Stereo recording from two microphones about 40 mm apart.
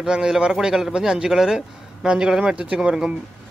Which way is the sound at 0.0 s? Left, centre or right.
Centre.